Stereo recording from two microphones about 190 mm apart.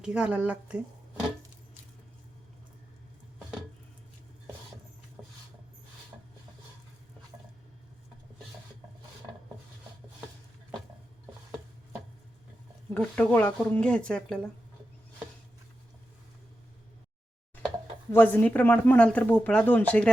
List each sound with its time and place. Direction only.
0.0 s speech: 5° right (ahead or behind)
12.9 s speech: 5° left (ahead or behind)
18.1 s speech: 10° left (ahead or behind)